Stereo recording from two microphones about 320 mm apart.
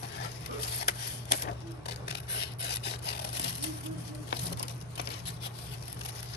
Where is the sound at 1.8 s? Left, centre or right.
Left.